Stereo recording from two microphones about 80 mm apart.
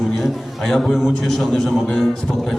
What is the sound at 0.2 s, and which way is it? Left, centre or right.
A man's voice, centre.